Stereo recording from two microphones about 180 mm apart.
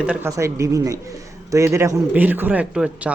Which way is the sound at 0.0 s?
10° right (ahead or behind).